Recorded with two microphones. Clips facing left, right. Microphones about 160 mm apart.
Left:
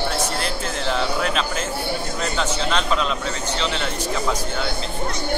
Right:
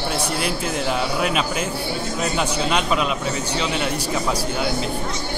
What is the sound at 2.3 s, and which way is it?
Speech, 10° right (ahead or behind).